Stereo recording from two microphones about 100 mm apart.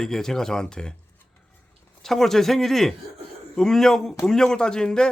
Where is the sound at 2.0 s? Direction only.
5° left (ahead or behind).